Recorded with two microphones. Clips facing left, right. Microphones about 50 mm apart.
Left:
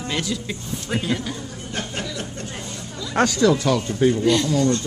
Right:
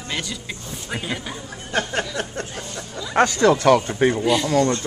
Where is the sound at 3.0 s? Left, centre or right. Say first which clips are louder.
Right 2 dB; centre.